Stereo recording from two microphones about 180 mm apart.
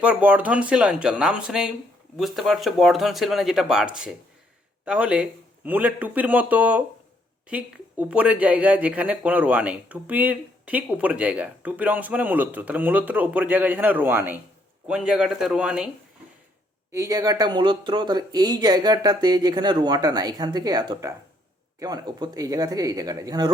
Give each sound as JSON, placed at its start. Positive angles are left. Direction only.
{"t": 0.0, "sound": "speech", "side_deg": -5}
{"t": 16.9, "sound": "speech", "side_deg": -20}